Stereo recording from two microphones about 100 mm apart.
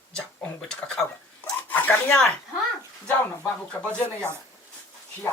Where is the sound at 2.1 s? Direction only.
10° left (ahead or behind).